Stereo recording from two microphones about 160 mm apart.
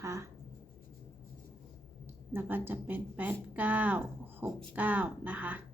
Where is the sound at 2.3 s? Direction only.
10° right (ahead or behind).